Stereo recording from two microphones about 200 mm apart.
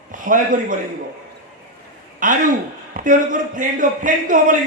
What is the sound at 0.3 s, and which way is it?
Speech, 40° right (ahead or behind).